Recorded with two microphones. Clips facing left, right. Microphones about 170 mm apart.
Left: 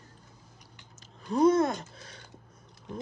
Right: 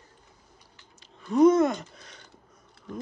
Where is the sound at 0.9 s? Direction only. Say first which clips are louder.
Right 5 dB; 35° left (ahead or behind).